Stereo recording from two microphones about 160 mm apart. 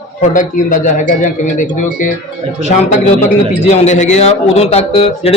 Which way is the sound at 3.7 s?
50° left (ahead or behind).